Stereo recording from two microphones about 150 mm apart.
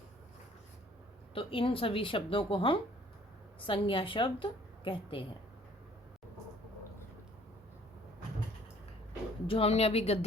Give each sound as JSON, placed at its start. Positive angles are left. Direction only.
{"t": 1.3, "sound": "a woman's voice", "side_deg": 35}
{"t": 9.5, "sound": "speech", "side_deg": 40}